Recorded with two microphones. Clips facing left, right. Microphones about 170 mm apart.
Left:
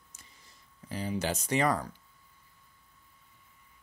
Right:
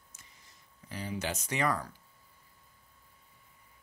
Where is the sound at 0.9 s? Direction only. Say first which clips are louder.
Left 4 dB; 30° left (ahead or behind).